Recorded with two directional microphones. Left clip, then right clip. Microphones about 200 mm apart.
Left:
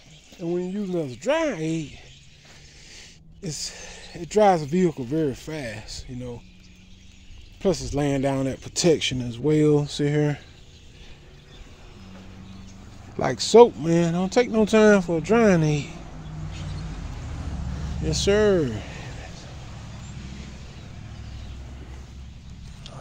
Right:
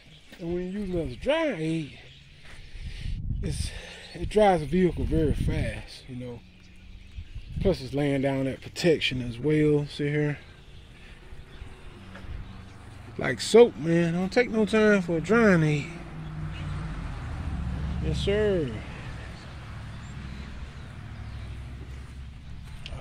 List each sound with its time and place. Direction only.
0.4 s speech: 20° left (ahead or behind); by 1.9 s 5° left (ahead or behind)
2.9 s speech: 10° left (ahead or behind)
7.6 s speech: 15° left (ahead or behind)
13.2 s speech: centre (ahead or behind)
18.0 s speech: 30° left (ahead or behind)